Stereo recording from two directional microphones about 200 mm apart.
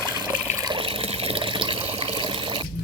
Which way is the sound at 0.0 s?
20° right (ahead or behind).